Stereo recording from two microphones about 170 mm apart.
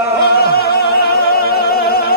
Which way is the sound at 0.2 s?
70° left (ahead or behind).